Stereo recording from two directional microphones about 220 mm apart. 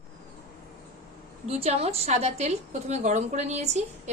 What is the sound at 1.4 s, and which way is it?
A woman's voice, 30° right (ahead or behind).